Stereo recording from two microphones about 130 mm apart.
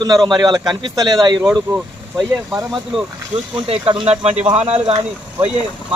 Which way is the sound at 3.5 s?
40° right (ahead or behind).